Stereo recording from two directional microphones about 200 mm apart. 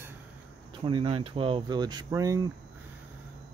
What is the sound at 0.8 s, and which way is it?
Speech, 25° right (ahead or behind).